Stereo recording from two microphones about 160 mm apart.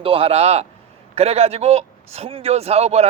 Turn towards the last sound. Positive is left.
turn(degrees=-40)  # may be behind; listen again after turning